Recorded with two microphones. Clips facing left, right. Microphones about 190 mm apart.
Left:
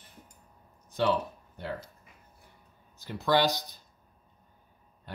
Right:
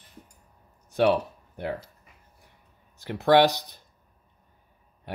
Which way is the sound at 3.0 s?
70° right (ahead or behind).